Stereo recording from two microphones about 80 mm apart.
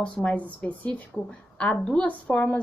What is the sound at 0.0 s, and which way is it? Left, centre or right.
A woman's voice, centre.